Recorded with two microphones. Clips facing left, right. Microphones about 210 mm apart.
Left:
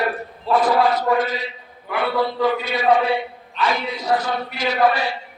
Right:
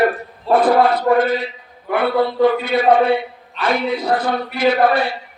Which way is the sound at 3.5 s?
55° right (ahead or behind).